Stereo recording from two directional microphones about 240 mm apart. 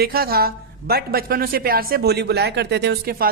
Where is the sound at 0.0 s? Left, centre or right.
Right.